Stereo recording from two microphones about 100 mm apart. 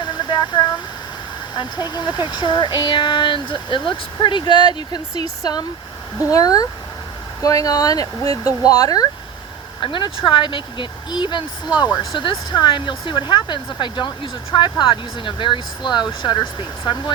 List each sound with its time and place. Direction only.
0.0 s a sound: 50° left (ahead or behind)
1.5 s speech: 45° left (ahead or behind)
9.8 s speech: 55° left (ahead or behind)